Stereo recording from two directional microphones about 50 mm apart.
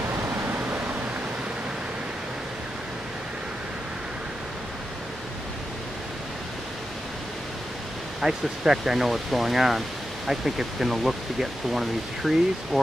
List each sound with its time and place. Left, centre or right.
0.2 s pink noise: right
8.2 s speech: centre